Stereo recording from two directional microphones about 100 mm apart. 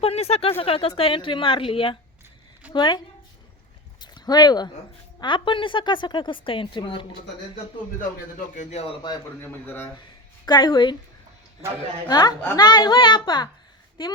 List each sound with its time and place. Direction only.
0.0 s speech: 90° left
0.6 s a woman's voice: 75° left (ahead or behind)
2.7 s a child's voice: 50° left (ahead or behind)
4.0 s a sound: 45° left (ahead or behind)
5.2 s a woman's voice: 55° left (ahead or behind)
8.7 s a man's voice: 80° left
9.4 s a man's voice: 20° left (ahead or behind)
10.4 s a child's voice: 50° left (ahead or behind)
12.0 s a child's voice: 40° left (ahead or behind)